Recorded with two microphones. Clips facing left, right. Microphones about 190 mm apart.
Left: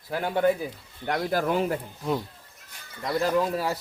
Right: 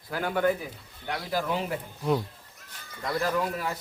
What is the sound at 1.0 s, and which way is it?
Speech, 55° left (ahead or behind).